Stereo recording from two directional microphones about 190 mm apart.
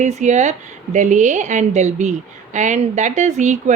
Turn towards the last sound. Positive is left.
turn(degrees=-40)  # may be behind; listen again after turning